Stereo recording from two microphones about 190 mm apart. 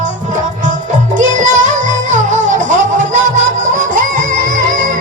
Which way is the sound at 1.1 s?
40° right (ahead or behind).